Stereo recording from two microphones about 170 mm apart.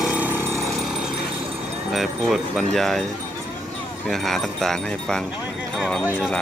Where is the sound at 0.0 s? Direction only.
10° right (ahead or behind).